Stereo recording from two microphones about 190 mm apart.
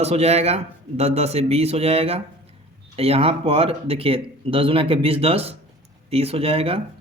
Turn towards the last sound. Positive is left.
turn(degrees=-30)  # may be behind; listen again after turning